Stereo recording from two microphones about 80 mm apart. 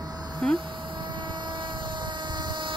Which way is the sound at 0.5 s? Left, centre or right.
Right.